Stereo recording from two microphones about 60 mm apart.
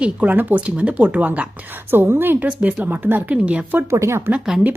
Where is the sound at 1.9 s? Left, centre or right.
Right.